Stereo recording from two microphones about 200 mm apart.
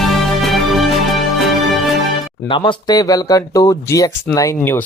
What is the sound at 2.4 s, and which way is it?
Speech, 25° left (ahead or behind).